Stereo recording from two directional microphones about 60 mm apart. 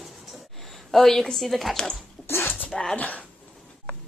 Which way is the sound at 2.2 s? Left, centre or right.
Left.